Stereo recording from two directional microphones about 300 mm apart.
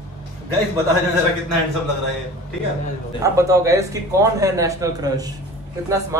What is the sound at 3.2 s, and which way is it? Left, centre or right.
A man's voice, centre.